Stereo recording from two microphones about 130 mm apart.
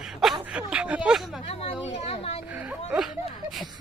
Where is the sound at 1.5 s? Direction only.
50° left (ahead or behind).